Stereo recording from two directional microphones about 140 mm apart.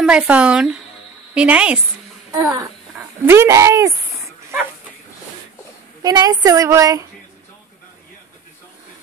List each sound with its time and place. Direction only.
0.0 s speech: 5° right (ahead or behind)
2.5 s speech: 20° right (ahead or behind)
6.0 s a woman's voice: 25° right (ahead or behind)